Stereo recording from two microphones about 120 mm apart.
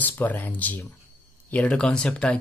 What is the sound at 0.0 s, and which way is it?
Speech, 15° left (ahead or behind).